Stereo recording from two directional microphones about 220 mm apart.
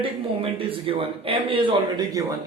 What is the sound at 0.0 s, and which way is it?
A man's voice, 25° right (ahead or behind).